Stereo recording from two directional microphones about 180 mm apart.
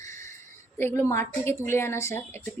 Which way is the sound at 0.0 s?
15° left (ahead or behind).